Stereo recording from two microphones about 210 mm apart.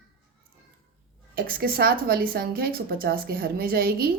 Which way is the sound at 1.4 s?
45° right (ahead or behind).